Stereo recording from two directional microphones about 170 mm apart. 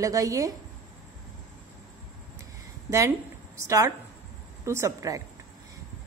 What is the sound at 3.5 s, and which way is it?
A woman's voice, 15° right (ahead or behind).